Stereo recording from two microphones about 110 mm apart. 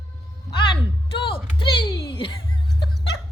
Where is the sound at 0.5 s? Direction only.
50° left (ahead or behind).